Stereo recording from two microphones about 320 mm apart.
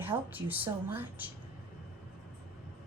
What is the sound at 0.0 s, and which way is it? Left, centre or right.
A woman's voice, centre.